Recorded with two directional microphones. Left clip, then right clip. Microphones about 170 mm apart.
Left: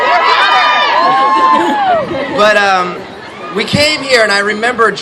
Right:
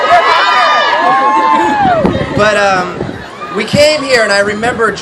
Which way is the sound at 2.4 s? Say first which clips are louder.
Left 1 dB; 50° left (ahead or behind).